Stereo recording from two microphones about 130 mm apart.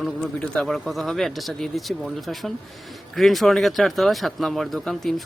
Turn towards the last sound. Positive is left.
turn(degrees=0)  # may be behind; listen again after turning